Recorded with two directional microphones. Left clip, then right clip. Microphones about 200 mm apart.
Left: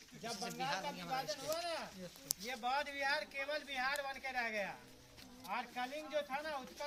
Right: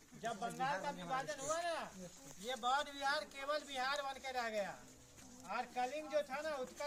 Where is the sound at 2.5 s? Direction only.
Centre (ahead or behind).